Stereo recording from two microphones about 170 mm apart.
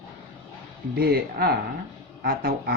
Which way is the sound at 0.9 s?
65° right (ahead or behind).